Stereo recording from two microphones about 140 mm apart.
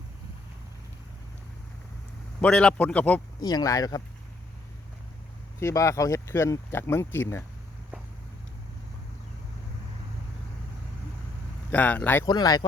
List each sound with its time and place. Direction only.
2.4 s speech: 5° left (ahead or behind)
3.4 s speech: 25° left (ahead or behind)
5.5 s speech: 20° left (ahead or behind)
11.7 s speech: 10° left (ahead or behind)
12.2 s speech: 30° left (ahead or behind)